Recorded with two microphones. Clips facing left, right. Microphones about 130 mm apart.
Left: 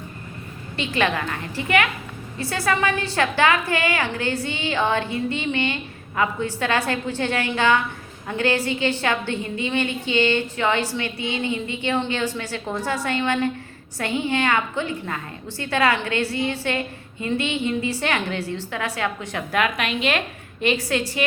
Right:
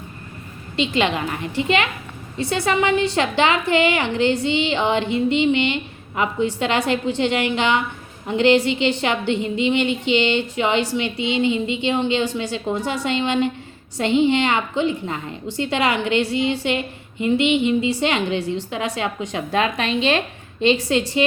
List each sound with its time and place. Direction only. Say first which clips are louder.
0.8 s a woman's voice: right 3 dB; 20° right (ahead or behind)